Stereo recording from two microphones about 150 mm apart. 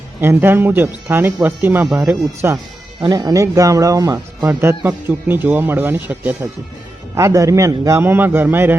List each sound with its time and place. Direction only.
0.2 s speech: 15° right (ahead or behind)
1.9 s speech: centre (ahead or behind)
3.0 s speech: 25° right (ahead or behind)